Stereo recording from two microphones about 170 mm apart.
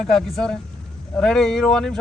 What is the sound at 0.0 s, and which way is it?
Speech, centre (ahead or behind).